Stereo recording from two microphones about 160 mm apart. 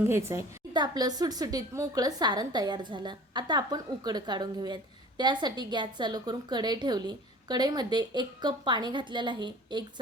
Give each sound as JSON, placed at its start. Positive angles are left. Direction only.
{"t": 0.0, "sound": "a woman's voice", "side_deg": -15}